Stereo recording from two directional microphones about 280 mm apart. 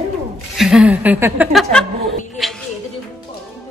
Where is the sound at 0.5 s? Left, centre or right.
Centre.